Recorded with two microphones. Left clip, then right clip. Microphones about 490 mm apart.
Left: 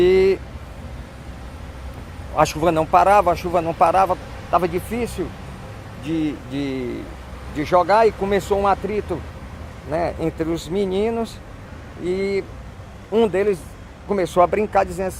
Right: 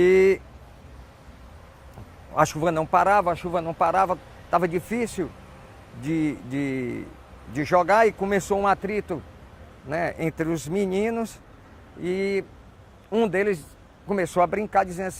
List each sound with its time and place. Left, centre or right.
0.0 s vehicle: right
2.3 s a man's voice: right
6.1 s a man's voice: right